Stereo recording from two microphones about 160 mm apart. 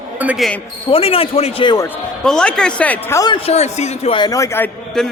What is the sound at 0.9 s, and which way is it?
Speech, 35° left (ahead or behind).